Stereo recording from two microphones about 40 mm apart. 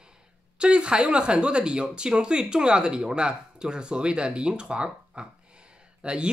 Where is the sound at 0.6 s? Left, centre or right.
Right.